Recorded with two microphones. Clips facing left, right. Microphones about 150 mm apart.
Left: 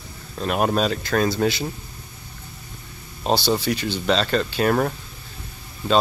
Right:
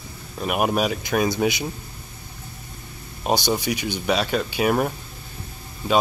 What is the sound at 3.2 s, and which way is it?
Speech, 15° right (ahead or behind).